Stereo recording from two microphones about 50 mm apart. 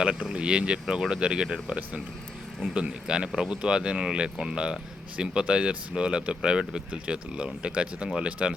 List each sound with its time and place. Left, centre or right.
0.0 s speech: centre
2.7 s speech: centre